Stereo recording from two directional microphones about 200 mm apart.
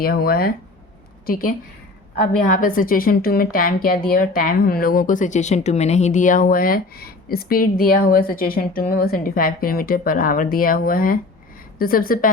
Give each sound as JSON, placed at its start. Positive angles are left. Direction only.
{"t": 0.0, "sound": "a woman's voice", "side_deg": 50}